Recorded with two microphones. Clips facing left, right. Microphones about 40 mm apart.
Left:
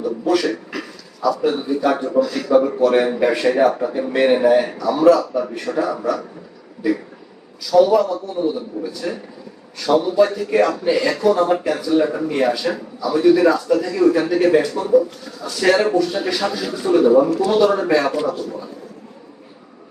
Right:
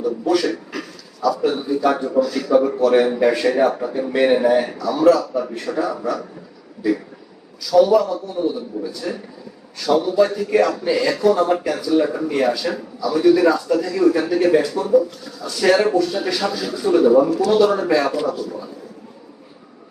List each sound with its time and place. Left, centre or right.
0.0 s a man's voice: centre
7.6 s a man's voice: centre
15.4 s a man's voice: centre